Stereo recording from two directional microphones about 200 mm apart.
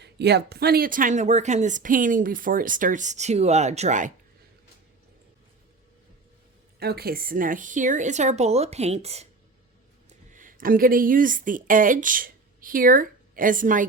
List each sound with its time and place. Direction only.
0.0 s speech: 55° right (ahead or behind); by 4.1 s 35° right (ahead or behind)
6.7 s speech: 50° right (ahead or behind)